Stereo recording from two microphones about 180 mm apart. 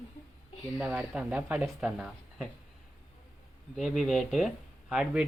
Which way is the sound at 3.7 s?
Centre (ahead or behind).